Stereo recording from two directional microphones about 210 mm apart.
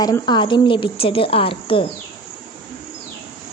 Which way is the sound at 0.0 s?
20° left (ahead or behind).